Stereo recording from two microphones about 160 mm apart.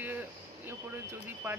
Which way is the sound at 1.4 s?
10° right (ahead or behind).